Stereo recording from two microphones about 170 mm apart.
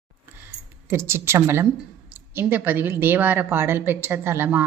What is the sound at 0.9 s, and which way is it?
A woman's voice, 15° right (ahead or behind).